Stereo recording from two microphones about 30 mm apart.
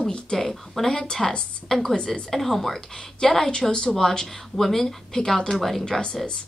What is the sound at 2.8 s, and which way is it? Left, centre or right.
Speech, left.